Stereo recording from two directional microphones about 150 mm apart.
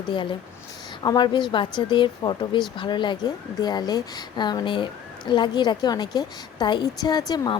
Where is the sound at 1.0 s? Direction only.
30° left (ahead or behind).